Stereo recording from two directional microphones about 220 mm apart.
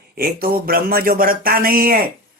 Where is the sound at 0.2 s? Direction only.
45° right (ahead or behind).